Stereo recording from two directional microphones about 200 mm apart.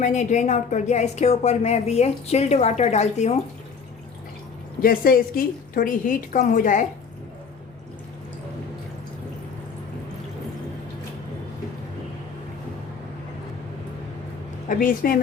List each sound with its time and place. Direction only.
0.0 s a woman's voice: 35° left (ahead or behind)
4.8 s a woman's voice: 45° left (ahead or behind)
14.7 s a woman's voice: 45° left (ahead or behind)